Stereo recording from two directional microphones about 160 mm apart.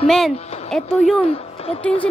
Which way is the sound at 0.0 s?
Centre (ahead or behind).